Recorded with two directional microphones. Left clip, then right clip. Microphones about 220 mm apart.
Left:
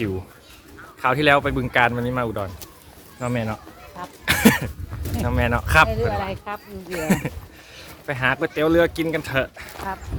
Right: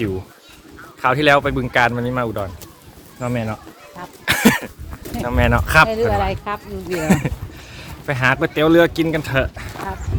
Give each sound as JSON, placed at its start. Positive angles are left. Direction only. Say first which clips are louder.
{"t": 1.0, "sound": "speech", "louder": "right 3 dB", "side_deg": -5}
{"t": 4.3, "sound": "a sound", "louder": "right 2 dB", "side_deg": -5}
{"t": 5.2, "sound": "speech", "louder": "right 5 dB", "side_deg": -5}
{"t": 5.9, "sound": "speech", "louder": "right 6 dB", "side_deg": -50}
{"t": 6.9, "sound": "speech", "louder": "right 4 dB", "side_deg": 0}